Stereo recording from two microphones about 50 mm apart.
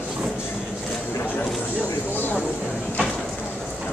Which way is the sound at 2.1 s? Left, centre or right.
Left.